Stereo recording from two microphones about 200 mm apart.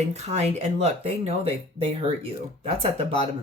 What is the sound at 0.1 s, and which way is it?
Speech, 35° right (ahead or behind).